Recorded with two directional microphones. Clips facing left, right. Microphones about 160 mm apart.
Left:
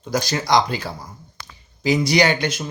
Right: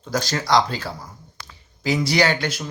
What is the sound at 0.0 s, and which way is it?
Speech, 15° left (ahead or behind).